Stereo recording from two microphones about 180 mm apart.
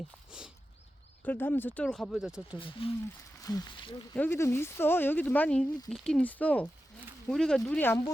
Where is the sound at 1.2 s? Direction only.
10° left (ahead or behind); by 2.6 s 5° right (ahead or behind).